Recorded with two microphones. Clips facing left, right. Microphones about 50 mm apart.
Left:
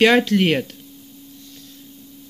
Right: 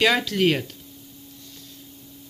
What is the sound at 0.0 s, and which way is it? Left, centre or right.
Speech, left.